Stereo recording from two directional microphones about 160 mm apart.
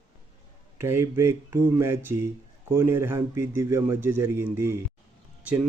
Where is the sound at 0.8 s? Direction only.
15° right (ahead or behind).